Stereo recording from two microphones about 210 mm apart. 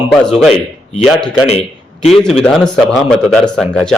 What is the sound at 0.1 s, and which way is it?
Speech, centre (ahead or behind).